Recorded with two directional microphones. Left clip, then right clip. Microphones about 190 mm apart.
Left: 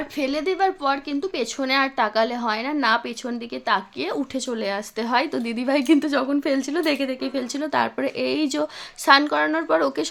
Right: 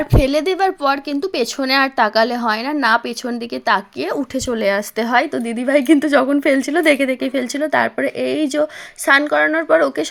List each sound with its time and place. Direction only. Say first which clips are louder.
0.1 s a woman's voice: right 7 dB; 40° right (ahead or behind); by 10.1 s 15° right (ahead or behind)